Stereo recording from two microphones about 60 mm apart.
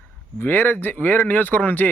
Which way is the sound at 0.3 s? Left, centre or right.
Left.